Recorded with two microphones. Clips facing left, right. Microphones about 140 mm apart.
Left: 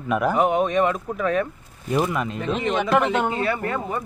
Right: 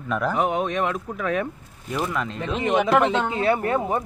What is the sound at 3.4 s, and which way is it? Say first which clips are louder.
Speech: right 3 dB; 20° right (ahead or behind).